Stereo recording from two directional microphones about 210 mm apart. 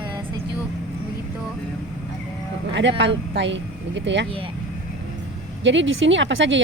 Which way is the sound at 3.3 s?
60° right (ahead or behind).